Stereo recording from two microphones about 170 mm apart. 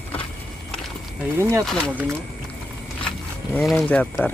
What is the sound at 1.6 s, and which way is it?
Speech, 5° left (ahead or behind).